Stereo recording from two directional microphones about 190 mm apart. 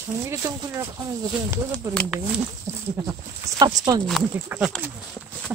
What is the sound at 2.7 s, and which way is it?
Speech, 15° right (ahead or behind).